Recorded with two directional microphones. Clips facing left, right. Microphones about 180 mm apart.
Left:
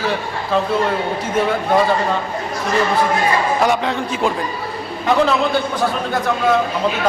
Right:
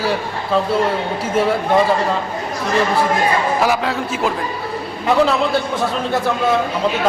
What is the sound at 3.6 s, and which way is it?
Speech, 5° right (ahead or behind).